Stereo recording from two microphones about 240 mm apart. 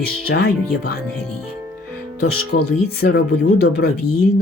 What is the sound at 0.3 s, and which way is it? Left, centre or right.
Speech, left.